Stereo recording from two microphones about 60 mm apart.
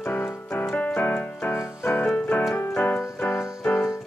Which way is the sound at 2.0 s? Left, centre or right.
Left.